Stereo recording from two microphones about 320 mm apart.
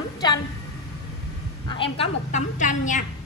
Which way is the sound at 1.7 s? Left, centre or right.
Centre.